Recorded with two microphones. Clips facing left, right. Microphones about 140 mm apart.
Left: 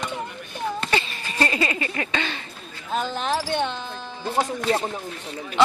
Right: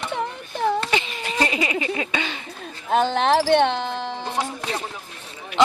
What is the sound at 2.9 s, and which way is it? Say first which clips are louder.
Music: right 7 dB; 70° right (ahead or behind).